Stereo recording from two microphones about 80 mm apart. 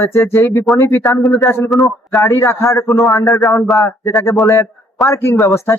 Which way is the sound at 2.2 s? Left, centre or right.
Left.